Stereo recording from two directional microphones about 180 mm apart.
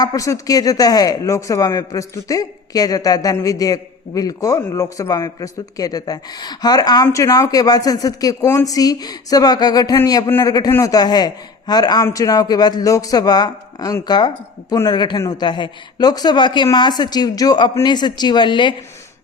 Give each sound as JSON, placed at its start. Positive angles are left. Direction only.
{"t": 0.0, "sound": "speech", "side_deg": 20}